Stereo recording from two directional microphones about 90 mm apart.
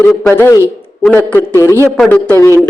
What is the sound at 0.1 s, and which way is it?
A man's voice, 10° left (ahead or behind).